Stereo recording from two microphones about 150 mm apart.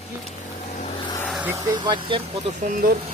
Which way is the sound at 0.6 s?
55° left (ahead or behind).